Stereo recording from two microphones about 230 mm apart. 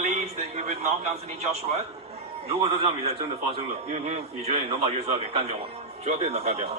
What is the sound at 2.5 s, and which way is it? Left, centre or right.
A man's voice, right.